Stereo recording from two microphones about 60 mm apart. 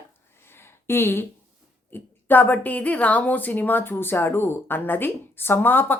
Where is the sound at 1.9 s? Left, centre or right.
Left.